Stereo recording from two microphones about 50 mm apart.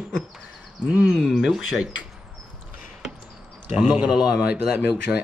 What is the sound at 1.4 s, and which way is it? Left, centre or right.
Speech, centre.